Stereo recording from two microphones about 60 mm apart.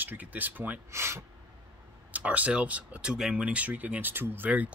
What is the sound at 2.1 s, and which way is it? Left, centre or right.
Speech, right.